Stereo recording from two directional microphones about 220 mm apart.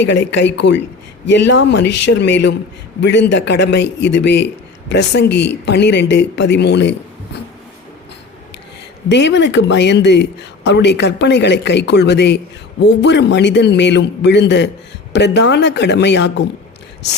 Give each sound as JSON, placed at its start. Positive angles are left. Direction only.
{"t": 0.0, "sound": "a man's voice", "side_deg": 55}
{"t": 9.0, "sound": "a man's voice", "side_deg": 50}